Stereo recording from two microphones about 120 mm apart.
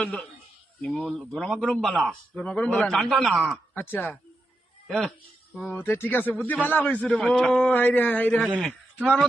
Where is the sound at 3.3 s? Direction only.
10° right (ahead or behind).